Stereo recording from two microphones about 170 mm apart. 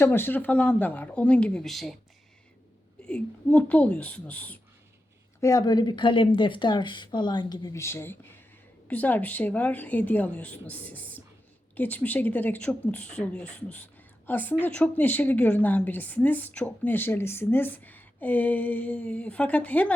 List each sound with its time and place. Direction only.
0.0 s speech: 15° left (ahead or behind)
3.0 s speech: 5° left (ahead or behind)
5.4 s a woman's voice: 20° left (ahead or behind)